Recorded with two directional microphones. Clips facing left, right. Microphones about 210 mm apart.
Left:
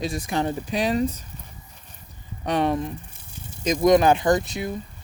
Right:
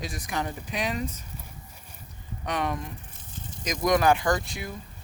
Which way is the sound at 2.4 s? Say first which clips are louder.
Left 7 dB; 30° left (ahead or behind).